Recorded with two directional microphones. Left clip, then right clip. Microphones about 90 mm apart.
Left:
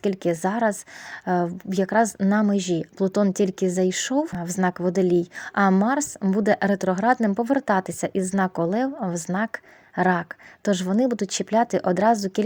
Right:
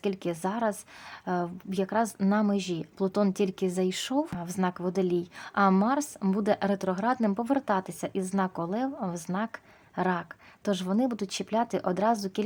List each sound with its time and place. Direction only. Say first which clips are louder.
0.0 s a woman's voice: left 7 dB; 55° left (ahead or behind)